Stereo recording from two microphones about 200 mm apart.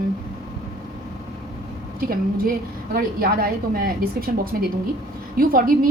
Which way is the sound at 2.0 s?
45° right (ahead or behind).